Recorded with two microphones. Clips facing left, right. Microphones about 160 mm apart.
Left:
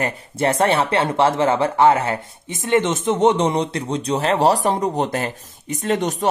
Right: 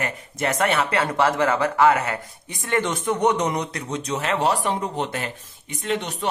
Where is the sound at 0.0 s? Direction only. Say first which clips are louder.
Left 5 dB; 30° left (ahead or behind).